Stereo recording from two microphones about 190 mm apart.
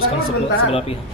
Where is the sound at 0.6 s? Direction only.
30° left (ahead or behind).